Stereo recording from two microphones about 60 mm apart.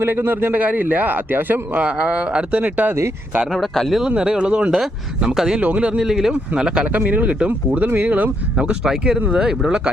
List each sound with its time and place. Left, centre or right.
0.0 s a man's voice: right
1.8 s speech: centre
3.5 s speech: centre
4.1 s speech: centre
5.5 s speech: right
6.0 s speech: centre
7.9 s speech: right
8.5 s speech: centre